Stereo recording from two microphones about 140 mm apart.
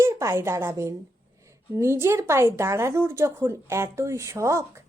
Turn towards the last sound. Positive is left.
turn(degrees=-20)  # may be behind; listen again after turning